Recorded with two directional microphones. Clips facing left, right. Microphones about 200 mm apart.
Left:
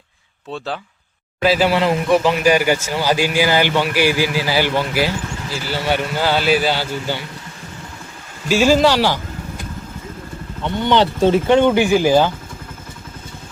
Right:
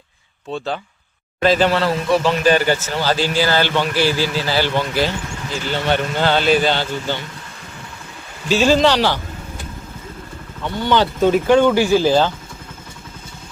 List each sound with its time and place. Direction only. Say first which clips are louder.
0.5 s speech: right 2 dB; 5° left (ahead or behind)
8.4 s speech: left 1 dB; 10° left (ahead or behind)
10.8 s speech: left 1 dB; 25° left (ahead or behind)